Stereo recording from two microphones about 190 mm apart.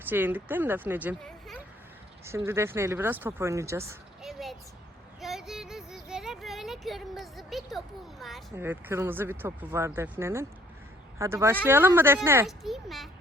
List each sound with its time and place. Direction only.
0.1 s speech: 10° right (ahead or behind)
2.2 s speech: 15° right (ahead or behind)
4.2 s a sound: centre (ahead or behind)
8.5 s speech: 10° right (ahead or behind)
12.5 s a child's voice: centre (ahead or behind)